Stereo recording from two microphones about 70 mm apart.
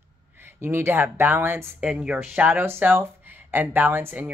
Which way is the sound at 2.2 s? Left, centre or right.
Right.